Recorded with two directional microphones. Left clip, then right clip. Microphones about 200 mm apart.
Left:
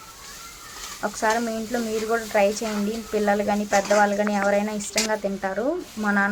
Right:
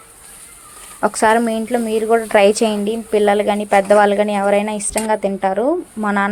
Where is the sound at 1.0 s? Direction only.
40° right (ahead or behind).